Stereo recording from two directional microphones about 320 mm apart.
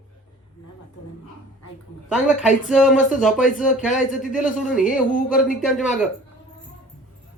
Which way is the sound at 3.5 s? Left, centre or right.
Left.